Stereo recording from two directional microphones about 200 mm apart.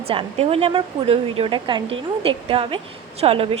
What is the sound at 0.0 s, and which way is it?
A woman's voice, 30° right (ahead or behind).